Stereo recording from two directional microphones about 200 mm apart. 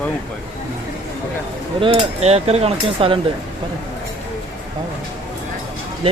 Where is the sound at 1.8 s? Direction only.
30° right (ahead or behind).